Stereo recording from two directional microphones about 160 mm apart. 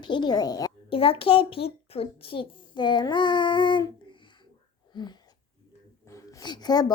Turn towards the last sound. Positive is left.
turn(degrees=25)  # may be behind; listen again after turning